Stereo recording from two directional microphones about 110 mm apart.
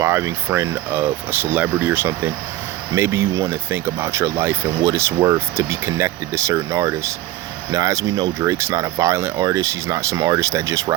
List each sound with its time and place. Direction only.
0.0 s speech: 30° right (ahead or behind)
8.4 s speech: 25° right (ahead or behind)